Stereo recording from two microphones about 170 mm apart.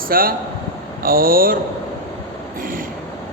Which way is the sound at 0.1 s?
60° right (ahead or behind).